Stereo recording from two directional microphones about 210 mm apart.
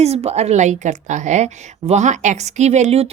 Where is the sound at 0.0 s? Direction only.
30° right (ahead or behind).